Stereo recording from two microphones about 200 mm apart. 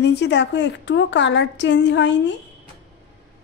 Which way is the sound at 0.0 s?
60° left (ahead or behind).